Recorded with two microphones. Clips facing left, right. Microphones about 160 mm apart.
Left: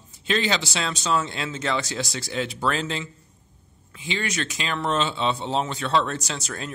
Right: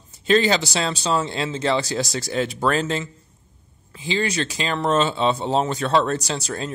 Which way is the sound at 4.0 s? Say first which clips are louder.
Right 5 dB; 30° right (ahead or behind).